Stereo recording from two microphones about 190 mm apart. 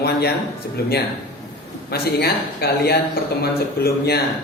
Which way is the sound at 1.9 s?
55° left (ahead or behind).